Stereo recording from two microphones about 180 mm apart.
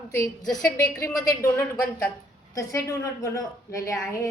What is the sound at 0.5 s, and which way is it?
A woman's voice, 20° left (ahead or behind).